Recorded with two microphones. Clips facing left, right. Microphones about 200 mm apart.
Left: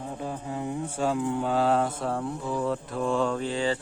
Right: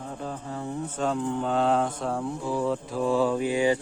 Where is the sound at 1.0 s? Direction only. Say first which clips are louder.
Left 1 dB; 5° left (ahead or behind).